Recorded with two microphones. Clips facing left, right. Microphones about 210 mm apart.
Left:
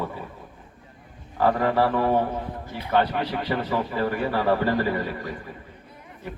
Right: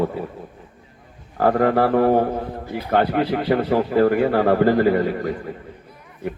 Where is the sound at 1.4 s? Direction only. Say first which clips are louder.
Right 4 dB; 55° right (ahead or behind).